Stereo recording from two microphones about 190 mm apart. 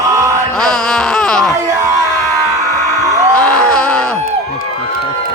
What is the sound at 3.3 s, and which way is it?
Groan, 5° left (ahead or behind).